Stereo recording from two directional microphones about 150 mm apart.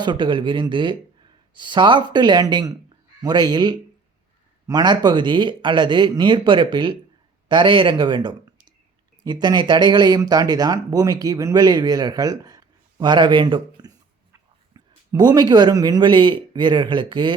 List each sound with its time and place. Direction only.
0.0 s a man's voice: 30° right (ahead or behind)